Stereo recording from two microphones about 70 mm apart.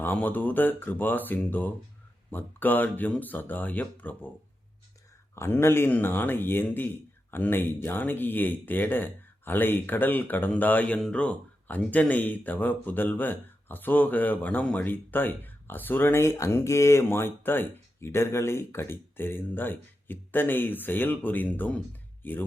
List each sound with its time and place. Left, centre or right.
0.0 s speech: left
5.3 s speech: left